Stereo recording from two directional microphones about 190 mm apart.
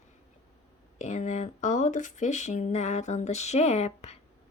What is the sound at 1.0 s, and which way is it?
Speech, 40° left (ahead or behind).